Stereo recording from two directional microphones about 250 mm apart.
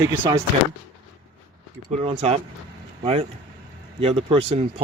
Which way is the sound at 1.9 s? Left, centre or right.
Right.